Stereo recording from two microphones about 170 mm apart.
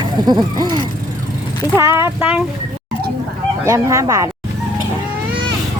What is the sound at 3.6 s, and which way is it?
Speech, 15° right (ahead or behind).